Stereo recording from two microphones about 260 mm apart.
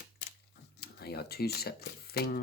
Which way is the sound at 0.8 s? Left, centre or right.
Left.